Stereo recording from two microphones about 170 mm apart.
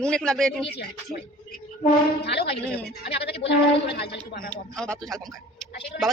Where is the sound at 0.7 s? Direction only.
75° left (ahead or behind).